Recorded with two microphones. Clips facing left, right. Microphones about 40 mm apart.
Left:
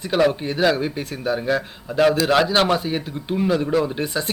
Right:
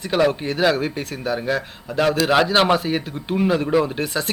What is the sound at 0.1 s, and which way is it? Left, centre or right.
A man's voice, centre.